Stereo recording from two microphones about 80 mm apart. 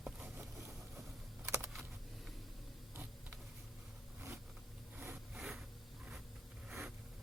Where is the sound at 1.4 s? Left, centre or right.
Right.